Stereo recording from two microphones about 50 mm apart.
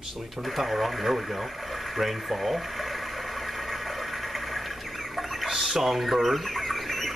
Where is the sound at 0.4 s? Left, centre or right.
Centre.